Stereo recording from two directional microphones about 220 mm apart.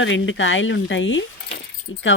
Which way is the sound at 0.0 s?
60° left (ahead or behind).